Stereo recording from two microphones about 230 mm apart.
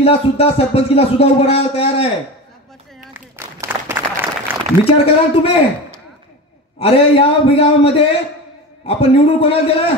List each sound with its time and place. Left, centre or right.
0.0 s speech: left
3.0 s applause: centre
4.8 s speech: left
6.8 s speech: left